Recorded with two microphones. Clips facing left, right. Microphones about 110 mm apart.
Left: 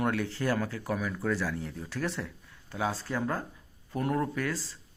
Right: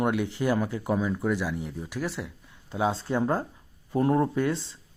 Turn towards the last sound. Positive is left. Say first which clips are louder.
# right 6 dB
turn(degrees=-20)  # may be behind; listen again after turning